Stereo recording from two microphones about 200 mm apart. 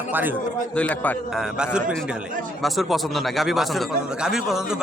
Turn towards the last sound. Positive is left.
turn(degrees=-5)  # may be behind; listen again after turning